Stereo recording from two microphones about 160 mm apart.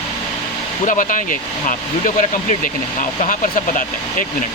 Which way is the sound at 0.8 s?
55° left (ahead or behind).